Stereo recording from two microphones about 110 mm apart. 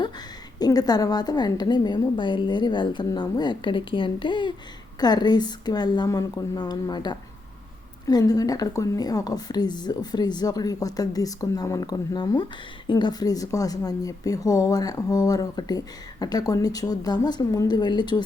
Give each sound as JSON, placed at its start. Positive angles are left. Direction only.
{"t": 0.6, "sound": "a woman's voice", "side_deg": 35}